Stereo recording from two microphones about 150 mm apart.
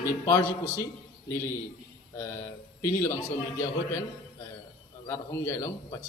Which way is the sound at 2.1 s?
20° left (ahead or behind).